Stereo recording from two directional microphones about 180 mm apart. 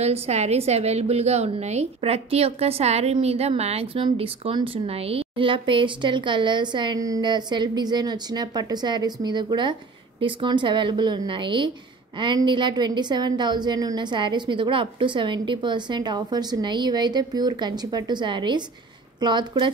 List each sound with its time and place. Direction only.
0.0 s a woman's voice: 35° right (ahead or behind)